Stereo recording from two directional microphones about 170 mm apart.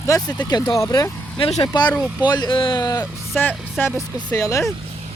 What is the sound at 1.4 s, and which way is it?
Speech, 35° left (ahead or behind).